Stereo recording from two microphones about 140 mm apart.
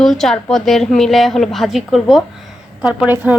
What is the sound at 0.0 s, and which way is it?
Speech, 5° left (ahead or behind).